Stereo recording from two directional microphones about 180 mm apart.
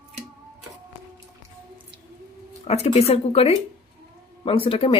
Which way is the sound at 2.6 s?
35° left (ahead or behind).